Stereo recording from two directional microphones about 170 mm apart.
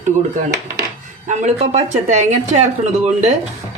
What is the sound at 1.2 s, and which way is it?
Speech, 40° right (ahead or behind).